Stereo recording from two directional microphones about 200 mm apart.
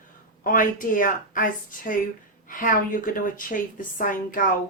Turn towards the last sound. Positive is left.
turn(degrees=40)  # may be behind; listen again after turning